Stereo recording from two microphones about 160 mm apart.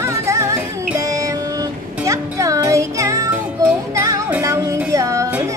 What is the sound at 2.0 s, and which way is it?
Music, 20° right (ahead or behind).